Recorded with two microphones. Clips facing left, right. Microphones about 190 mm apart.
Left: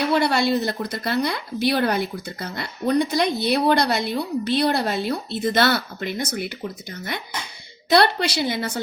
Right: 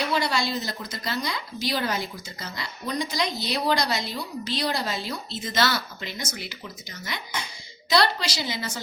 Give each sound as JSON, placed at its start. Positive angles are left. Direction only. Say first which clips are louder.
{"t": 0.1, "sound": "speech", "louder": "left 7 dB", "side_deg": 60}